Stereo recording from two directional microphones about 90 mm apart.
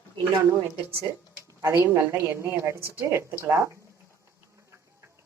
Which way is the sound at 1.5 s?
30° right (ahead or behind).